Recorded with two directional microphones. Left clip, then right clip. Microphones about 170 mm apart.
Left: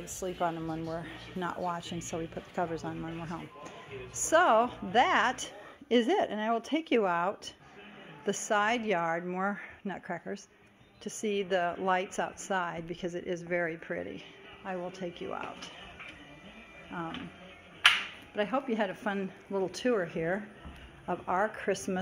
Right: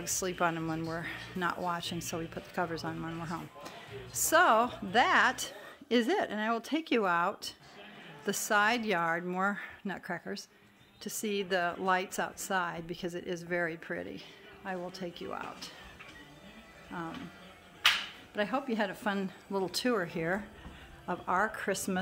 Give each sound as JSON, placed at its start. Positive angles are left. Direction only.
{"t": 0.4, "sound": "speech", "side_deg": -55}
{"t": 0.8, "sound": "speech", "side_deg": -35}
{"t": 1.4, "sound": "a woman's voice", "side_deg": -20}
{"t": 16.9, "sound": "a woman's voice", "side_deg": -10}
{"t": 18.3, "sound": "a woman's voice", "side_deg": -10}